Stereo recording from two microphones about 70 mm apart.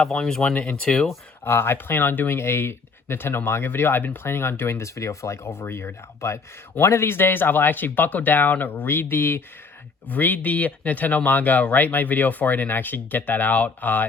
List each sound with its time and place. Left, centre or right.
0.0 s speech: centre
1.5 s speech: left